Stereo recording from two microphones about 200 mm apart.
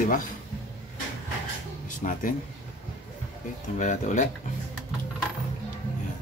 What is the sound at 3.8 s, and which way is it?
Speech, 40° left (ahead or behind).